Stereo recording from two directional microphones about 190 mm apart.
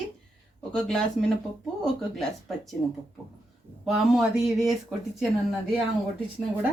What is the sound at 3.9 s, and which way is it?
Speech, centre (ahead or behind).